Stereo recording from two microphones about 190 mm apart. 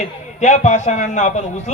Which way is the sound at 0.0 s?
40° left (ahead or behind).